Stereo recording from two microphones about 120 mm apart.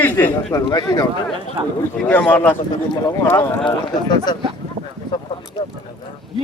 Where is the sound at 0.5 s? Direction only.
30° left (ahead or behind).